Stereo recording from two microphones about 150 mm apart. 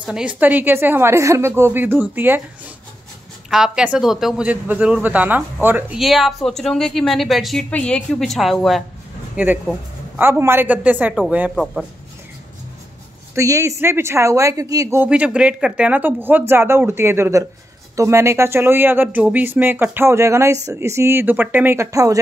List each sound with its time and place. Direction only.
0.1 s speech: 5° right (ahead or behind)
3.4 s speech: 5° right (ahead or behind)
9.4 s speech: 10° right (ahead or behind)
13.3 s speech: 20° right (ahead or behind)